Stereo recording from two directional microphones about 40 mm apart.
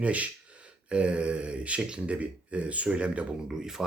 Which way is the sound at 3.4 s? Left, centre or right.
Centre.